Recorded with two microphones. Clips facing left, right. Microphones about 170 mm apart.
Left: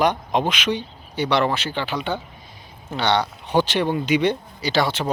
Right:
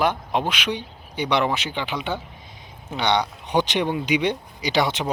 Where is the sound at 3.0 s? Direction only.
15° right (ahead or behind).